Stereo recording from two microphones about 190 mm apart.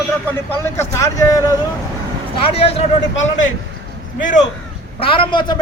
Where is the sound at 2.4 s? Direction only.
30° left (ahead or behind).